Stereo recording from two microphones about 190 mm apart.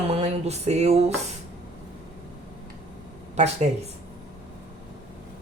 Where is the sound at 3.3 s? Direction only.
35° right (ahead or behind).